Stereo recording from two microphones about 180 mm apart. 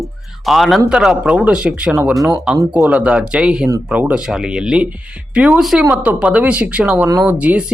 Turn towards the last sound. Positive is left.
turn(degrees=-5)  # may be behind; listen again after turning